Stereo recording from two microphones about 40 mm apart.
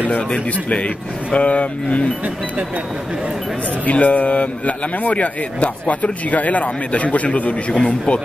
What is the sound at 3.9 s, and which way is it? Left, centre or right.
A man's voice, left.